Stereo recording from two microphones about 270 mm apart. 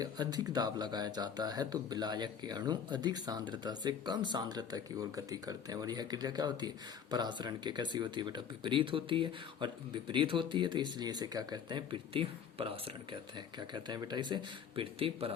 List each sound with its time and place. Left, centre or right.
0.0 s speech: centre